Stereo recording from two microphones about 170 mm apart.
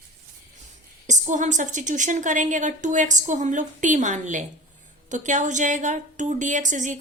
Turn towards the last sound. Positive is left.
turn(degrees=-45)  # may be behind; listen again after turning